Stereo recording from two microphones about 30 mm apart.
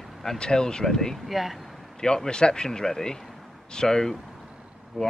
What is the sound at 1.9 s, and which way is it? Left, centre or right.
Speech, left.